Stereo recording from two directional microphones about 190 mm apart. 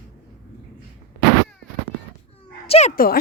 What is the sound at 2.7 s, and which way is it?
Speech, 35° left (ahead or behind).